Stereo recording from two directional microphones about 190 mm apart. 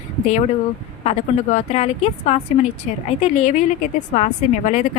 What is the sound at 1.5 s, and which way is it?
Speech, 35° left (ahead or behind).